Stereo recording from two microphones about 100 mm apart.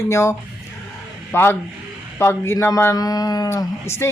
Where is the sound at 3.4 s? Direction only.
25° left (ahead or behind).